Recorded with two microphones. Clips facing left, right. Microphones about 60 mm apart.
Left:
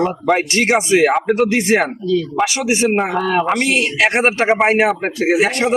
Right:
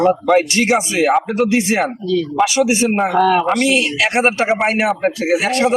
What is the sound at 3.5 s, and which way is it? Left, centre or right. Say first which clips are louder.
Speech: right 1 dB; left.